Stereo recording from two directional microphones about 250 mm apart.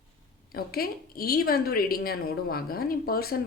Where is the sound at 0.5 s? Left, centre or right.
Left.